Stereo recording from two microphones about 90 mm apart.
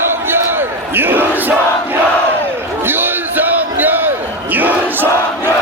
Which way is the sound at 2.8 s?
25° right (ahead or behind).